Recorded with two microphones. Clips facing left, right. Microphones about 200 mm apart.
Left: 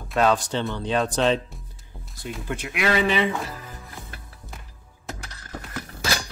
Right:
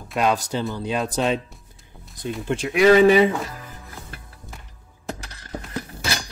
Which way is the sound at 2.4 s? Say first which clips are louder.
Right 10 dB; 30° right (ahead or behind).